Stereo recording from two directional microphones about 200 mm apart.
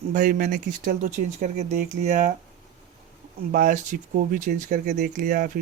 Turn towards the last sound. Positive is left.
turn(degrees=-45)  # may be behind; listen again after turning